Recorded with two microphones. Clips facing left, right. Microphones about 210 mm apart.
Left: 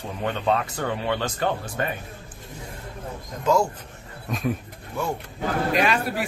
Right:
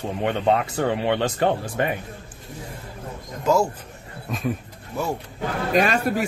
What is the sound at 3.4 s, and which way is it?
Speech, 5° right (ahead or behind).